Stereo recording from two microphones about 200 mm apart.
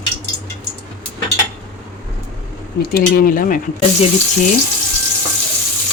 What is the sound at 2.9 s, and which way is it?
Speech, 45° left (ahead or behind).